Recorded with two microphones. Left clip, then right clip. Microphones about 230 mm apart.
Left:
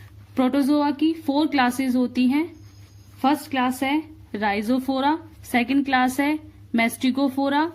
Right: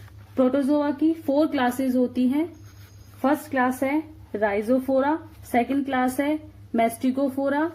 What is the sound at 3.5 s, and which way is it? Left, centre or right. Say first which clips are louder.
A woman's voice: even; left.